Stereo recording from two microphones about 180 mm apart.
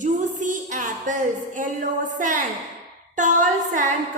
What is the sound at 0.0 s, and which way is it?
Music, 45° right (ahead or behind).